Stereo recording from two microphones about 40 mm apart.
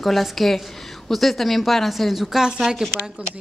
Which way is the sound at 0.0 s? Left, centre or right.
Centre.